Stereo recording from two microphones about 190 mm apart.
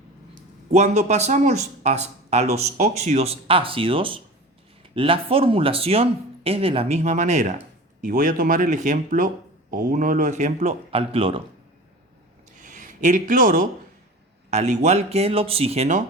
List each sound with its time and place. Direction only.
0.7 s speech: 35° right (ahead or behind)
12.6 s speech: 45° right (ahead or behind)